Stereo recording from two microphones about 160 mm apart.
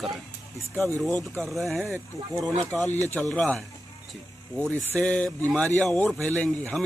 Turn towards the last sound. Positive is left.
turn(degrees=10)  # may be behind; listen again after turning